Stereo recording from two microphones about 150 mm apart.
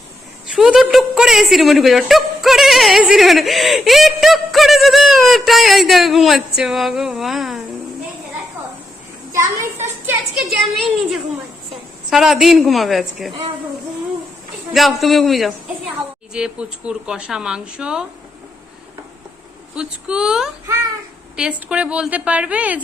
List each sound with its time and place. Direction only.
0.4 s a woman's voice: 5° right (ahead or behind)
9.3 s a sound: 20° right (ahead or behind)
10.6 s a woman's voice: centre (ahead or behind)
14.7 s a woman's voice: centre (ahead or behind)
19.7 s a woman's voice: 5° right (ahead or behind)